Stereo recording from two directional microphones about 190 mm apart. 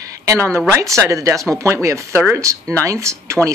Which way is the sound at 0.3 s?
15° right (ahead or behind).